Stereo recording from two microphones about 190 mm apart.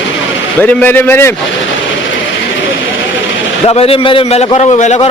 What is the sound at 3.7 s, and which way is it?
A man's voice, 30° left (ahead or behind).